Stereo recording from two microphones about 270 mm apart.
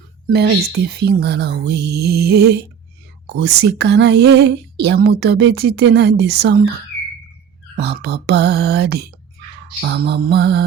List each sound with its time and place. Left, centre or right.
0.3 s speech: right
7.8 s speech: right